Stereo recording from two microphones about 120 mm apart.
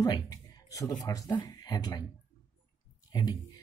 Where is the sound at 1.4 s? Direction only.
35° left (ahead or behind).